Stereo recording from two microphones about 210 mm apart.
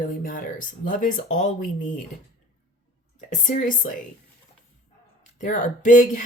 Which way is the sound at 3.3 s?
35° left (ahead or behind).